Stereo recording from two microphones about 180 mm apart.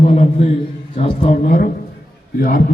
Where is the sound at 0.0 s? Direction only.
35° left (ahead or behind).